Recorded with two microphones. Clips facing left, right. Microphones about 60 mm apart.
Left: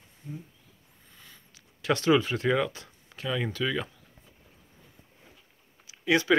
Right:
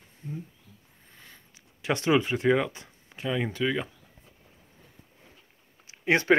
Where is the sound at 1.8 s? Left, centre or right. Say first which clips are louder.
Left 1 dB; right.